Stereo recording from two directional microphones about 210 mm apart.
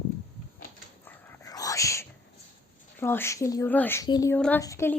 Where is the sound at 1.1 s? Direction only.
15° left (ahead or behind).